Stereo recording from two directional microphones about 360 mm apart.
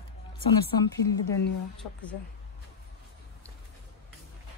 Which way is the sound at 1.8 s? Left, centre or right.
Left.